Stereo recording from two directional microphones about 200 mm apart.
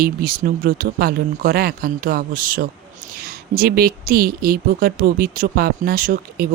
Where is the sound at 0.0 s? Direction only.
45° right (ahead or behind).